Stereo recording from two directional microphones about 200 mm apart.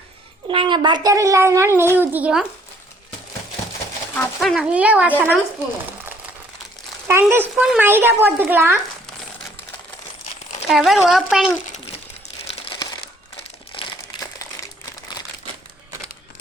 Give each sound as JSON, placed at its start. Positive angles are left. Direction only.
{"t": 0.4, "sound": "speech", "side_deg": -25}
{"t": 4.1, "sound": "speech", "side_deg": 5}
{"t": 7.1, "sound": "speech", "side_deg": -10}
{"t": 10.7, "sound": "speech", "side_deg": 0}
{"t": 12.6, "sound": "crumpling", "side_deg": 20}